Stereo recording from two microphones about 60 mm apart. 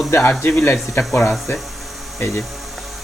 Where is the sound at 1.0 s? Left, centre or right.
Centre.